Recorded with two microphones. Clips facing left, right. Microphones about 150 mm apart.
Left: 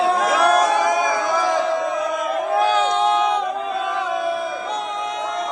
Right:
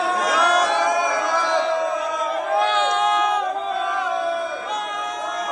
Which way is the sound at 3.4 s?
Centre (ahead or behind).